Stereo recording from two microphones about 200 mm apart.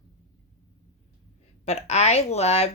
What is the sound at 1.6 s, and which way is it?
A woman's voice, 35° left (ahead or behind).